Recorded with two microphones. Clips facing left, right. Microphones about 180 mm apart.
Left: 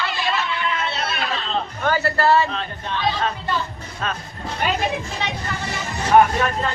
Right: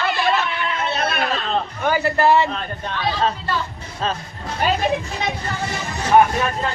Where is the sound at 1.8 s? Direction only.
15° right (ahead or behind).